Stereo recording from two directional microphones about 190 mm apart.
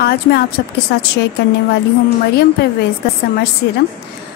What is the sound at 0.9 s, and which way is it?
Speech, 65° left (ahead or behind).